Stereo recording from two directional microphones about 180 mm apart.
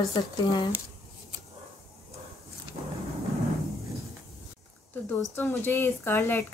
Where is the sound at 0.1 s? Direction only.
25° left (ahead or behind).